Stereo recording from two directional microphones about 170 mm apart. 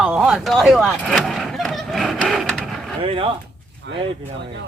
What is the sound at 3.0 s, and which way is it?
Speech, 30° right (ahead or behind).